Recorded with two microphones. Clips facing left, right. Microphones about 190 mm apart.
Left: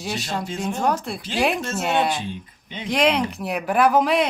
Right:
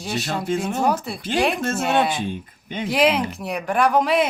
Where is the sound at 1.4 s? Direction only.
Centre (ahead or behind).